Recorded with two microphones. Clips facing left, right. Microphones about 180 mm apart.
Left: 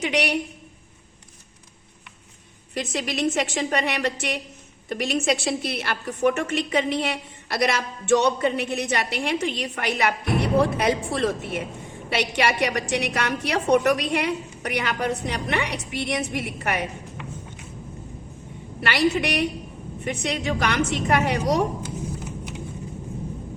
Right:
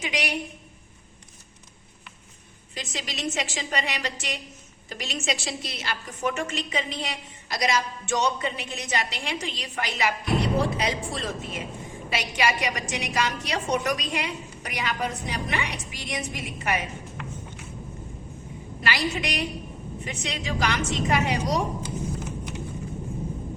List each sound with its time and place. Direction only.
0.0 s a woman's voice: 65° left (ahead or behind)
2.7 s a woman's voice: 60° left (ahead or behind)
18.8 s a woman's voice: 65° left (ahead or behind)